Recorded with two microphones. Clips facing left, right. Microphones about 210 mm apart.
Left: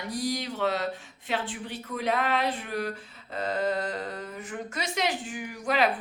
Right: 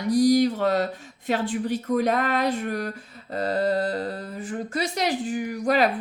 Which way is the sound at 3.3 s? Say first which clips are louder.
Right 5 dB; 35° right (ahead or behind).